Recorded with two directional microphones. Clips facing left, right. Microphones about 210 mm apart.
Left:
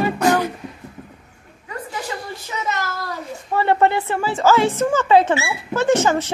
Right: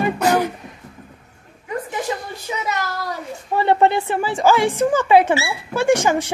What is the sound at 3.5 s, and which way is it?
A woman's voice, 15° right (ahead or behind).